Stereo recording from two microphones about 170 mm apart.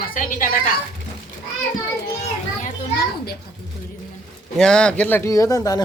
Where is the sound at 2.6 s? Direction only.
60° left (ahead or behind).